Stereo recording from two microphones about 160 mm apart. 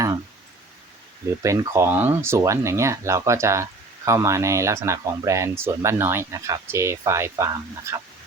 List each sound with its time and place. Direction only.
1.4 s speech: 20° right (ahead or behind)